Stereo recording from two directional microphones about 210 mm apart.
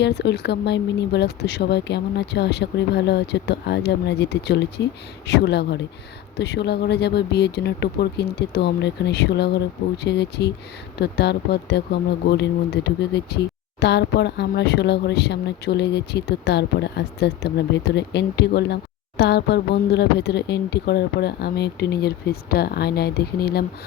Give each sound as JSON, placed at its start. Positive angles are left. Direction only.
{"t": 0.0, "sound": "speech", "side_deg": 50}